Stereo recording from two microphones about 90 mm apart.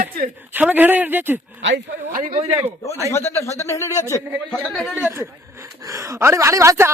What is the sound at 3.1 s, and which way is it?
Speech, 30° left (ahead or behind).